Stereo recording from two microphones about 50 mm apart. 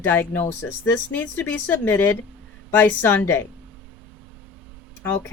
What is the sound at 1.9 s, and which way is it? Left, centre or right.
A woman's voice, left.